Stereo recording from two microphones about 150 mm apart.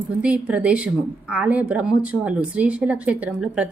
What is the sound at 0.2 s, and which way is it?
A woman's voice, 10° right (ahead or behind).